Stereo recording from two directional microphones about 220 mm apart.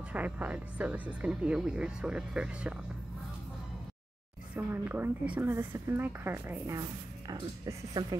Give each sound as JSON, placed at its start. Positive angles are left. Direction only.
{"t": 0.1, "sound": "speech", "side_deg": -5}
{"t": 4.6, "sound": "a woman's voice", "side_deg": -10}